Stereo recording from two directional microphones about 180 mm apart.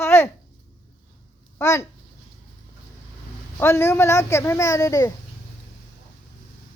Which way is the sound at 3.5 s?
15° left (ahead or behind).